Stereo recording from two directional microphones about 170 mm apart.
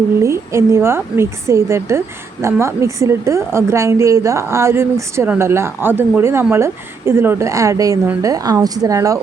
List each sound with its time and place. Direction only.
0.2 s a woman's voice: 15° right (ahead or behind)